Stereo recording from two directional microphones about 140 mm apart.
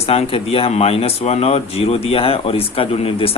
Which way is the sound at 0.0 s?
45° left (ahead or behind).